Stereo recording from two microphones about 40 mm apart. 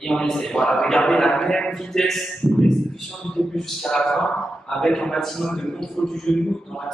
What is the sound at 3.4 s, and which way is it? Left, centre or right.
A man's voice, centre.